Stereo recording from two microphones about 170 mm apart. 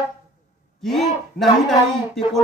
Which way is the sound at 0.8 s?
Centre (ahead or behind).